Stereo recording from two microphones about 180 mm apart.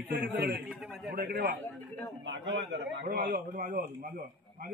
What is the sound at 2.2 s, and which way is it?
A man's voice, 90° right.